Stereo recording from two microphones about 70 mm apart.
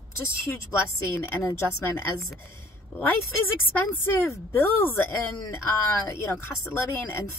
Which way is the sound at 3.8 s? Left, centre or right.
Left.